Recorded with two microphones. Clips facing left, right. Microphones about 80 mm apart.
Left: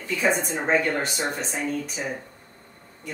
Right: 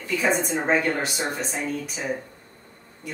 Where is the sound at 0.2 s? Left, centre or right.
Centre.